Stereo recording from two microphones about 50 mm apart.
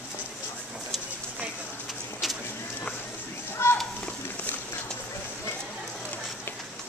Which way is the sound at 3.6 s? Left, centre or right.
Left.